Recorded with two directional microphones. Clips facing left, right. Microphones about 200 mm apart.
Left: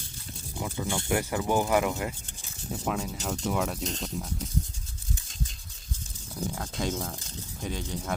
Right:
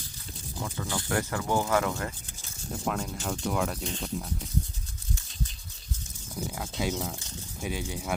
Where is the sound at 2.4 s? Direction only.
Centre (ahead or behind).